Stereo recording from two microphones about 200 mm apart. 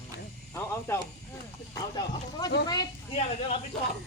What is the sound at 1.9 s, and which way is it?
Speech, 20° left (ahead or behind).